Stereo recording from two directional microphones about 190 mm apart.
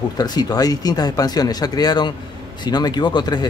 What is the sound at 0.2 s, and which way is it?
Speech, 20° left (ahead or behind).